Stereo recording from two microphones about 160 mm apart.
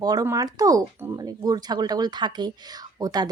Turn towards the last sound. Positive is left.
turn(degrees=-25)  # may be behind; listen again after turning